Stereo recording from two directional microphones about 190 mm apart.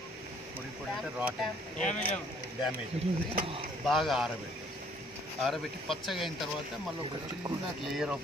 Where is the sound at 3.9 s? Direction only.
Centre (ahead or behind).